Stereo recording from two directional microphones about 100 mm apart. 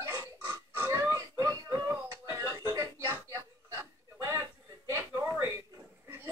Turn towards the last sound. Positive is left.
turn(degrees=-25)  # may be behind; listen again after turning